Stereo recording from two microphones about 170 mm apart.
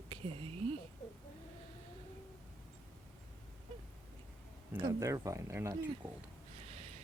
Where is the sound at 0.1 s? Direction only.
30° right (ahead or behind).